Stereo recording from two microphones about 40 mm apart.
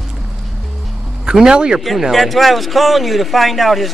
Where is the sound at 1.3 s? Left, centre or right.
Centre.